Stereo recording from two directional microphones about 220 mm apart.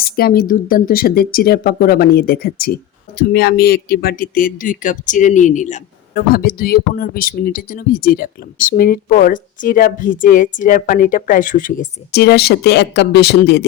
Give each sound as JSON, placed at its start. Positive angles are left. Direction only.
{"t": 0.0, "sound": "speech", "side_deg": 45}